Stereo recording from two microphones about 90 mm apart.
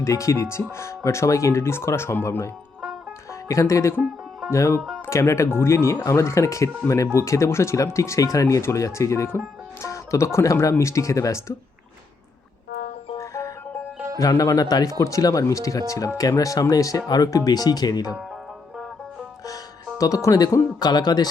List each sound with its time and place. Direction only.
0.0 s speech: 35° left (ahead or behind)
3.5 s speech: 35° left (ahead or behind)
13.1 s music: 35° left (ahead or behind)
14.2 s speech: 40° left (ahead or behind)
20.0 s speech: 40° left (ahead or behind)